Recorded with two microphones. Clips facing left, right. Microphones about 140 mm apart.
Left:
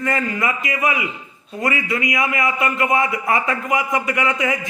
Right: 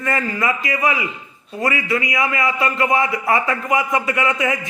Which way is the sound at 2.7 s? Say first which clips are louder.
Right 1 dB; 25° right (ahead or behind).